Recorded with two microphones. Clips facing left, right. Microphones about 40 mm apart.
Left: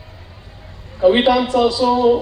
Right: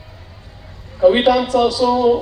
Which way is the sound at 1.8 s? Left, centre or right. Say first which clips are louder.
Left 1 dB; left.